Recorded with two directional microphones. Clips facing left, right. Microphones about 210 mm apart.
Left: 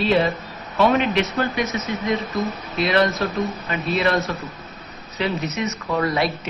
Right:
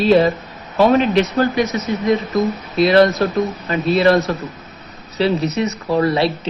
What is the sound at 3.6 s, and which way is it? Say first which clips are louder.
Speech: right 9 dB; 35° right (ahead or behind).